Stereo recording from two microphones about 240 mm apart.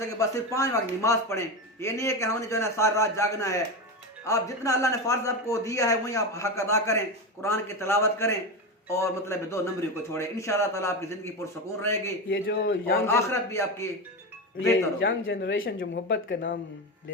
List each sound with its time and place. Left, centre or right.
0.2 s a man's voice: centre
12.3 s speech: left
13.1 s a man's voice: centre
15.0 s speech: left